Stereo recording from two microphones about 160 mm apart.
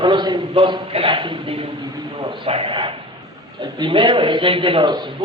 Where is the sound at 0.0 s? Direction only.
25° right (ahead or behind).